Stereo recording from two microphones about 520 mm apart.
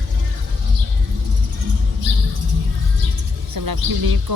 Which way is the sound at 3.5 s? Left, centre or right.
Right.